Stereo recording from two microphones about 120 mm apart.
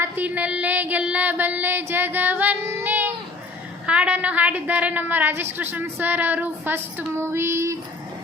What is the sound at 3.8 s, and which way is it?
A woman's voice, 10° right (ahead or behind).